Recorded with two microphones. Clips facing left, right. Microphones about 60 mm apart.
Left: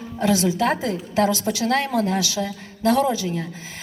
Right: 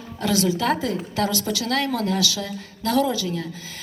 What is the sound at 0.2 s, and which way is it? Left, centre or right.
A woman's voice, left.